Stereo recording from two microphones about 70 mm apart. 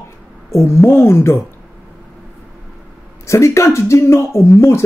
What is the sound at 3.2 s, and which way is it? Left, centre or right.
Speech, left.